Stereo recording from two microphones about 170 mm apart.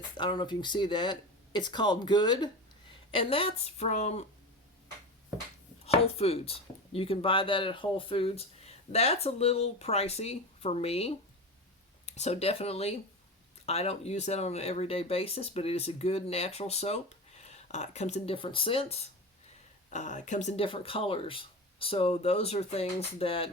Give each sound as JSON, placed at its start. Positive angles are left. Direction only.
{"t": 0.2, "sound": "speech", "side_deg": 25}
{"t": 5.8, "sound": "speech", "side_deg": 35}
{"t": 19.9, "sound": "speech", "side_deg": 45}